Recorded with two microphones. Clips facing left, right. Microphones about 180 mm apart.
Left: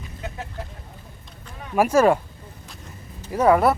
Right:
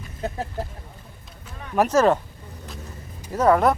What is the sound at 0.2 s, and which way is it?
Speech, 40° right (ahead or behind).